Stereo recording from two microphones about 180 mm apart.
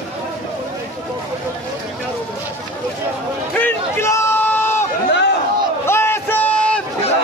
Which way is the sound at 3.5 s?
10° left (ahead or behind).